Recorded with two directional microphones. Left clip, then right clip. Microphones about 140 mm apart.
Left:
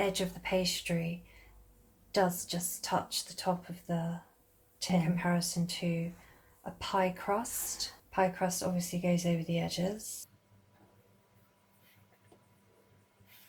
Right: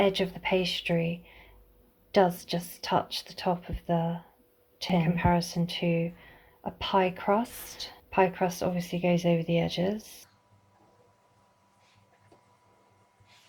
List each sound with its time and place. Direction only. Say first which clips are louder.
0.0 s speech: right 7 dB; 45° right (ahead or behind)
2.1 s speech: right 6 dB; 50° right (ahead or behind)